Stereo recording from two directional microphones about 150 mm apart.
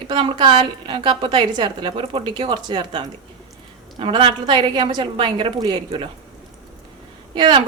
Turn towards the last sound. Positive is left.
turn(degrees=-30)  # may be behind; listen again after turning